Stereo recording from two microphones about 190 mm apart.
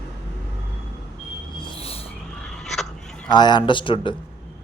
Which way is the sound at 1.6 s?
30° left (ahead or behind).